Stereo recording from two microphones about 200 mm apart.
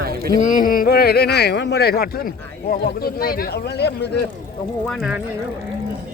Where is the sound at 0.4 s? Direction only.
45° left (ahead or behind).